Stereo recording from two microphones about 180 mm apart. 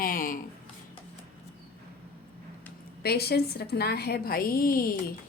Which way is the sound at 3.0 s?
60° left (ahead or behind).